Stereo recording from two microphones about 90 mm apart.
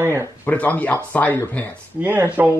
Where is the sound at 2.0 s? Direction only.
20° right (ahead or behind).